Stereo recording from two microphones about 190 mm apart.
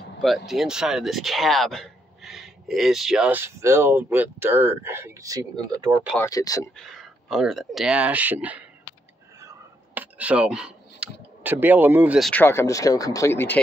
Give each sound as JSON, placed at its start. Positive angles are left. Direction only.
{"t": 0.5, "sound": "speech", "side_deg": -5}
{"t": 6.1, "sound": "speech", "side_deg": 15}
{"t": 6.8, "sound": "speech", "side_deg": 0}
{"t": 9.9, "sound": "speech", "side_deg": -10}
{"t": 12.3, "sound": "speech", "side_deg": 10}